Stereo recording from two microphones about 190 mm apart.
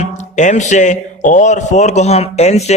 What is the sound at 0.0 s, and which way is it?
A man's voice, 40° left (ahead or behind).